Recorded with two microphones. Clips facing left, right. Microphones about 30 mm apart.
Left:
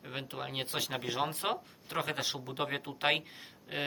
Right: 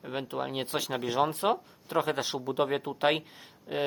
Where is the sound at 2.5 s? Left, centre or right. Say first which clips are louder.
Right 7 dB; centre.